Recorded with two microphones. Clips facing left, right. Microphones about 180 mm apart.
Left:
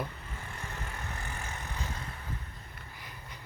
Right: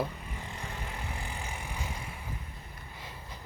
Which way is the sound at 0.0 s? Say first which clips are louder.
Right 4 dB; 15° right (ahead or behind).